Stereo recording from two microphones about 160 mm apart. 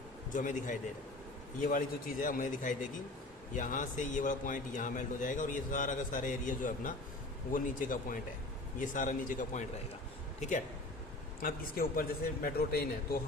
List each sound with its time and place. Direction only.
0.3 s a man's voice: 55° left (ahead or behind)
11.4 s speech: 65° left (ahead or behind)